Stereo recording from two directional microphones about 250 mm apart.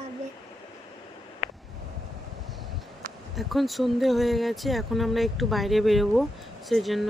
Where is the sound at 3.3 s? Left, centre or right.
Centre.